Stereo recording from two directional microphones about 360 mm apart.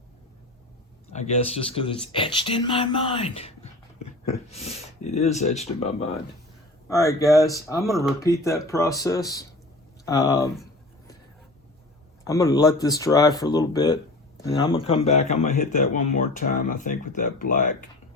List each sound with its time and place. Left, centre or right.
1.1 s speech: centre
12.2 s speech: centre